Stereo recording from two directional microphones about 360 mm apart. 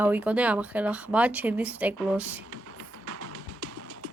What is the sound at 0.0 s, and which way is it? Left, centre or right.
Speech, centre.